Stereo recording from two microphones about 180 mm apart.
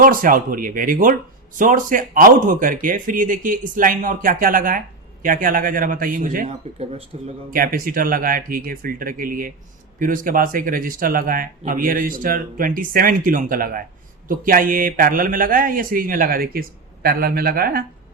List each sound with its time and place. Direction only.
0.0 s speech: 50° right (ahead or behind)
7.1 s speech: 35° right (ahead or behind)
7.5 s speech: 50° right (ahead or behind)